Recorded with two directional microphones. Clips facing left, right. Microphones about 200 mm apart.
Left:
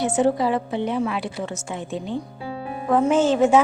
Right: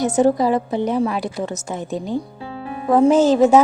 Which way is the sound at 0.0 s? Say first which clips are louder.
Right 4 dB; 40° right (ahead or behind).